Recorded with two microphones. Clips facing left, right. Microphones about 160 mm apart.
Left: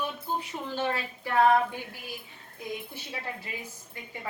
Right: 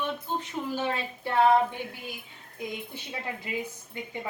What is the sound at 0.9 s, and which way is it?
Speech, 25° right (ahead or behind).